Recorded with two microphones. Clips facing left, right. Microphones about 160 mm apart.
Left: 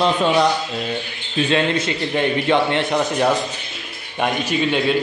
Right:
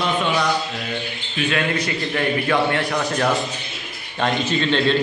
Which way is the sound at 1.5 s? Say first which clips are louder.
Left 3 dB; 25° left (ahead or behind).